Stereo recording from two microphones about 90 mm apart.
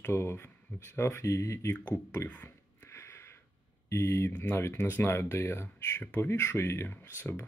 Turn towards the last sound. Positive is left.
turn(degrees=25)  # may be behind; listen again after turning